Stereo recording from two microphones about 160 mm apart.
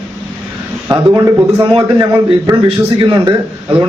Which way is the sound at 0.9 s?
20° right (ahead or behind).